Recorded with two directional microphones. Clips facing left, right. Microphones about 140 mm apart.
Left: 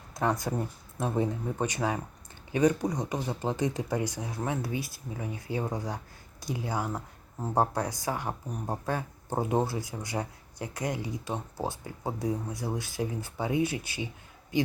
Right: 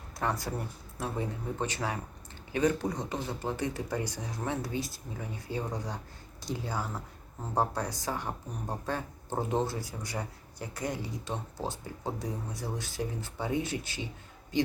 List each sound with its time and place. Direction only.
0.1 s speech: 15° left (ahead or behind)